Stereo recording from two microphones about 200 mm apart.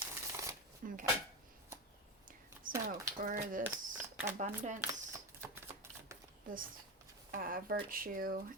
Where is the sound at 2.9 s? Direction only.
40° right (ahead or behind).